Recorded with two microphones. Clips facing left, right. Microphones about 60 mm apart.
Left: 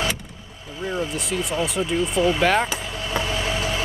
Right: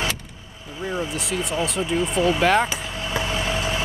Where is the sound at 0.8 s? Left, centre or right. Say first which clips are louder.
Left 1 dB; centre.